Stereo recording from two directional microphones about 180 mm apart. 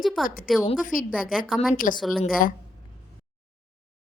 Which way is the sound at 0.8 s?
50° left (ahead or behind).